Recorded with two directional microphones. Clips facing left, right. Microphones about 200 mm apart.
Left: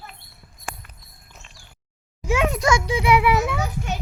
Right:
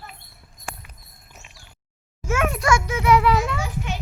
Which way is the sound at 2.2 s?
15° left (ahead or behind).